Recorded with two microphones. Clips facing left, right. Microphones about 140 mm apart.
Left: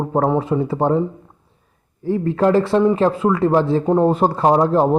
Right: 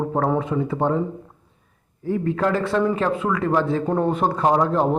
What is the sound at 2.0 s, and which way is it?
Speech, 30° left (ahead or behind).